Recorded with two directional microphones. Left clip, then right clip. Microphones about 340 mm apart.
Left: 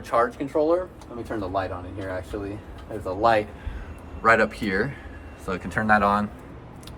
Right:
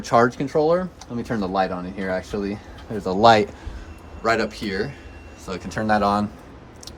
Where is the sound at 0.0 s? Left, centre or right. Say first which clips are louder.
Right 5 dB; centre.